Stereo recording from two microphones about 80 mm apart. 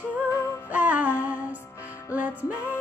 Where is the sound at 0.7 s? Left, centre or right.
Right.